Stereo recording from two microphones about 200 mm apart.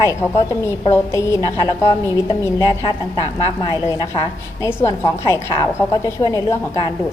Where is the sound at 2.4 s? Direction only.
20° left (ahead or behind).